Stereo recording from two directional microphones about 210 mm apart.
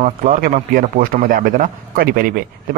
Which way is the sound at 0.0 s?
40° right (ahead or behind).